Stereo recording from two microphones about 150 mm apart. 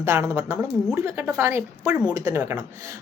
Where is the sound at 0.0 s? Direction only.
15° right (ahead or behind).